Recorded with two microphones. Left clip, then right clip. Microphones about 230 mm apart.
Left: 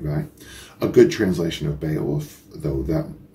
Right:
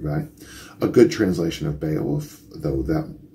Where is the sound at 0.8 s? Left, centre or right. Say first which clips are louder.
Left 1 dB; centre.